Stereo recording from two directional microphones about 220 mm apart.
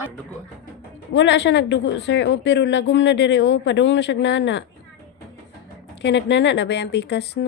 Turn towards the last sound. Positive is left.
turn(degrees=50)  # may be behind; listen again after turning